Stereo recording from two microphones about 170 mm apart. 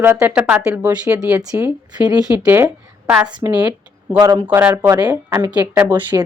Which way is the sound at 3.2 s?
25° right (ahead or behind).